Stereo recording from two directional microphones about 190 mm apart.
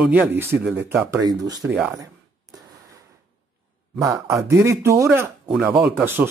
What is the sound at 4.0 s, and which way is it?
Speech, 15° right (ahead or behind).